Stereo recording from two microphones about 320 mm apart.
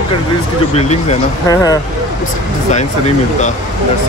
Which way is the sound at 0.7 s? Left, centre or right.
Centre.